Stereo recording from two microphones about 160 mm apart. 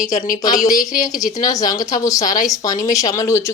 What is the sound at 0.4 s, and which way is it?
Speech, 20° left (ahead or behind).